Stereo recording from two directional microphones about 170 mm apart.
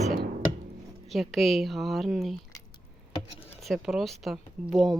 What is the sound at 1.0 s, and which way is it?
Speech, centre (ahead or behind).